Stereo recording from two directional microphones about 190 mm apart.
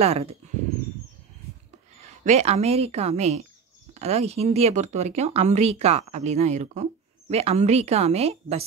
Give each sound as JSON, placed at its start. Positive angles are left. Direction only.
{"t": 0.0, "sound": "speech", "side_deg": -30}
{"t": 2.0, "sound": "speech", "side_deg": -35}